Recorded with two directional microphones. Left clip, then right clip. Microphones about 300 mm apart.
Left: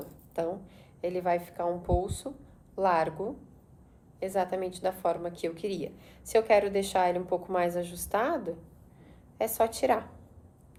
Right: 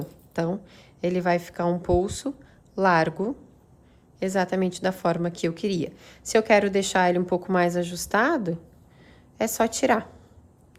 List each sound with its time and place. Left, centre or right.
0.3 s a woman's voice: right
4.2 s a woman's voice: right